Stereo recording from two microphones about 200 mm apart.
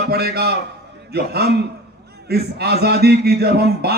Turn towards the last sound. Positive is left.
turn(degrees=-50)  # may be behind; listen again after turning